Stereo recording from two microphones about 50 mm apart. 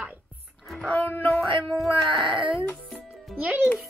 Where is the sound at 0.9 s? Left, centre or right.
Left.